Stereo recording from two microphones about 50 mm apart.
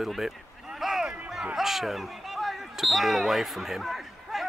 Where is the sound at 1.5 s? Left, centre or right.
Centre.